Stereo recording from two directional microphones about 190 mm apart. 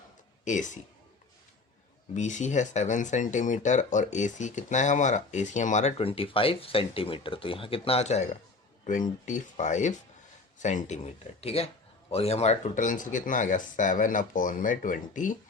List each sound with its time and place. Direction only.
0.4 s speech: 40° left (ahead or behind)
2.1 s speech: 40° left (ahead or behind)